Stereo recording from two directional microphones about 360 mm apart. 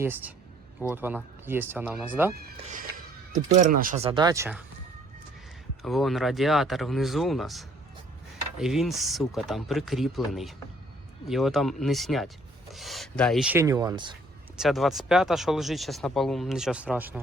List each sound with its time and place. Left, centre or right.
0.0 s speech: centre
2.3 s speech: right; by 4.6 s centre
5.8 s speech: centre
14.5 s speech: centre